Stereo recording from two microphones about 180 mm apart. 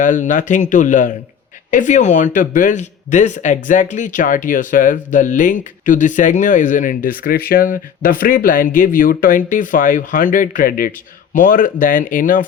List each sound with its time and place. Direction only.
0.0 s speech: 45° left (ahead or behind)